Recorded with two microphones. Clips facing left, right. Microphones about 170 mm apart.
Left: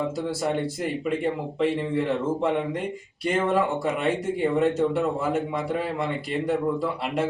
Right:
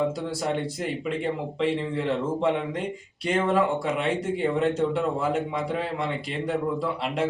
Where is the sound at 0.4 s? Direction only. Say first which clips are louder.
Left 1 dB; 5° left (ahead or behind).